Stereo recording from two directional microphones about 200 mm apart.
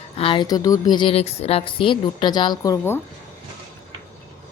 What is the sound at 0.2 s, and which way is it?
A woman's voice, 25° left (ahead or behind).